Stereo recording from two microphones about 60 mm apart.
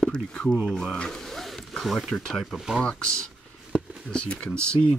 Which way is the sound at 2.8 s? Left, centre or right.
Centre.